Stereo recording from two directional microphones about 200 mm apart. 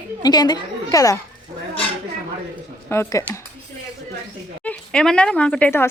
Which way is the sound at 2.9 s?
15° left (ahead or behind).